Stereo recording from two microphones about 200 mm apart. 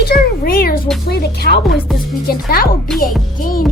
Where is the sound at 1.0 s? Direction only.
50° left (ahead or behind).